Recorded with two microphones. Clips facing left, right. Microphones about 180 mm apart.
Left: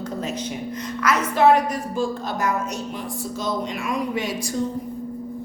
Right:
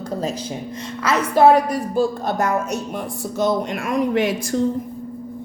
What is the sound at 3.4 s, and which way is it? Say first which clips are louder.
Speech: right 7 dB; 60° right (ahead or behind).